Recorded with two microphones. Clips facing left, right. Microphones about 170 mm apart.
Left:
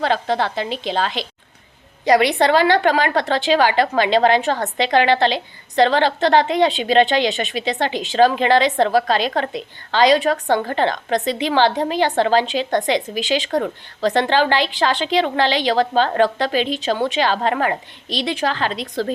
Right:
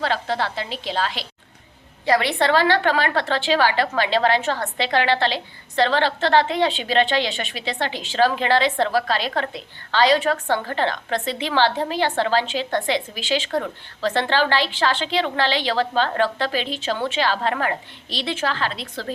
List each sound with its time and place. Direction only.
0.0 s a woman's voice: 20° left (ahead or behind)